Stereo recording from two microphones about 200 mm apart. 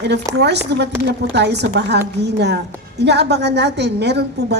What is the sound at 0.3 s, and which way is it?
Speech, 60° right (ahead or behind).